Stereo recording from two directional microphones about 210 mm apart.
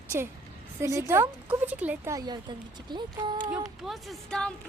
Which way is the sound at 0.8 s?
15° right (ahead or behind).